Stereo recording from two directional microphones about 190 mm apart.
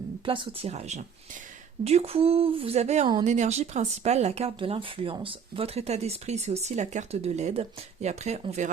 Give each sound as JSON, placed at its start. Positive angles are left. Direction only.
{"t": 0.3, "sound": "speech", "side_deg": -30}